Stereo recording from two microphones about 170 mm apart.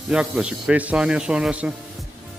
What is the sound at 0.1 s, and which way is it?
Speech, 5° right (ahead or behind).